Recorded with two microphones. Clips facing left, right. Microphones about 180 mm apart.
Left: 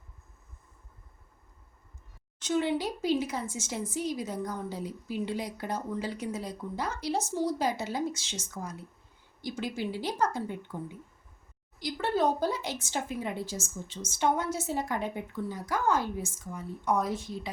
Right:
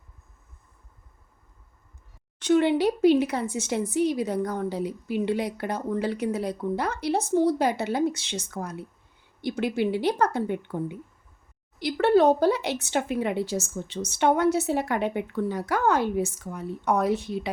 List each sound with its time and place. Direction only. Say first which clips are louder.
2.4 s speech: right 8 dB; 65° right (ahead or behind)